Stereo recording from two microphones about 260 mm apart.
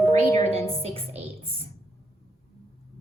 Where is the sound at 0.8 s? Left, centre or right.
Right.